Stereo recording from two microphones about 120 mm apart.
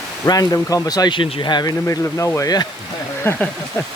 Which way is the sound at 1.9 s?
25° left (ahead or behind).